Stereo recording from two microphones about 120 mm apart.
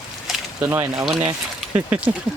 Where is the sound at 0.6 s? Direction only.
20° right (ahead or behind).